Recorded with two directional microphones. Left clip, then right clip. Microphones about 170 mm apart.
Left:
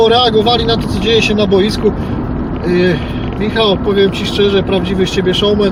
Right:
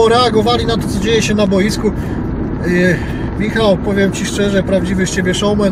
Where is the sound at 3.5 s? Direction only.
15° right (ahead or behind).